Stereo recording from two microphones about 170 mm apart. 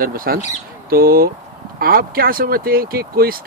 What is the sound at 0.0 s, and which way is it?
Speech, 60° right (ahead or behind).